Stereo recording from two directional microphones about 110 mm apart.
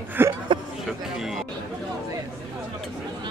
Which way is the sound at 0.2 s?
20° right (ahead or behind).